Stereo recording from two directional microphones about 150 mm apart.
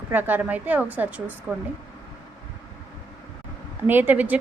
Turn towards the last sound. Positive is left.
turn(degrees=-10)  # may be behind; listen again after turning